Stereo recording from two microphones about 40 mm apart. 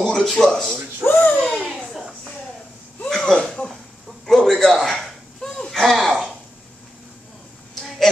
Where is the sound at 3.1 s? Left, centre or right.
Centre.